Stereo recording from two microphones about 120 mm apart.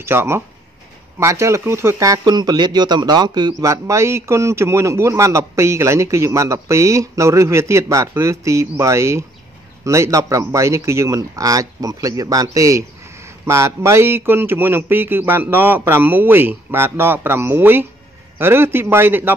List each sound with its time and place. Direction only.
0.0 s speech: 20° right (ahead or behind); by 3.5 s 35° right (ahead or behind)
3.6 s speech: 25° right (ahead or behind)